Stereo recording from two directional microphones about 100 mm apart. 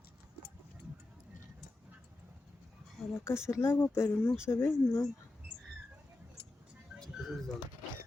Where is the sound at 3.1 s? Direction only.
30° left (ahead or behind).